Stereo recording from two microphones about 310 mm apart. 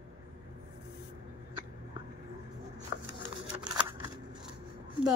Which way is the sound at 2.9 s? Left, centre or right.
Left.